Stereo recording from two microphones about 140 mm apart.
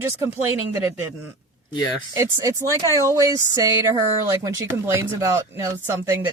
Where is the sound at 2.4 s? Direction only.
25° right (ahead or behind).